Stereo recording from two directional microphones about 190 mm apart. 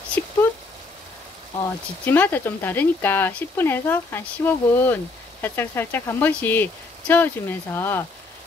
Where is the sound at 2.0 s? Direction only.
10° left (ahead or behind).